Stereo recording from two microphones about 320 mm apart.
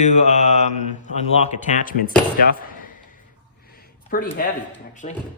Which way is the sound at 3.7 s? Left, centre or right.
Left.